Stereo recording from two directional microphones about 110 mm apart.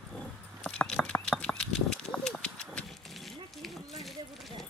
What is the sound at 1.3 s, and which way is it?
Horse, 10° left (ahead or behind).